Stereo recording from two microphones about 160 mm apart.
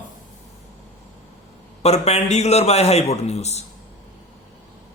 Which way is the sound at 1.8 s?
40° left (ahead or behind).